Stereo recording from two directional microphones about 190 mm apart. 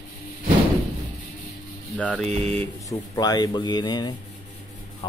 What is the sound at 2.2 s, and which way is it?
Speech, 35° right (ahead or behind).